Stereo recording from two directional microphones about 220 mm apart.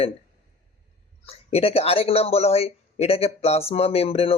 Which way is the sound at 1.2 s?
25° left (ahead or behind).